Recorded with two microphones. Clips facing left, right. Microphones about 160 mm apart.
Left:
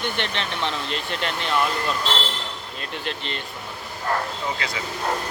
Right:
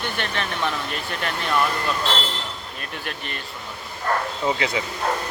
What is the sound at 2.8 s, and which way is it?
Speech, 20° left (ahead or behind).